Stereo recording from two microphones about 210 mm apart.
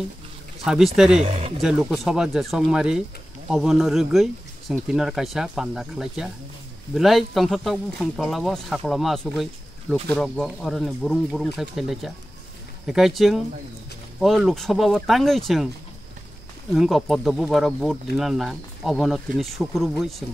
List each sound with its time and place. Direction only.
0.7 s speech: centre (ahead or behind)
1.2 s speech: 30° right (ahead or behind)
1.6 s speech: centre (ahead or behind)
16.7 s speech: centre (ahead or behind)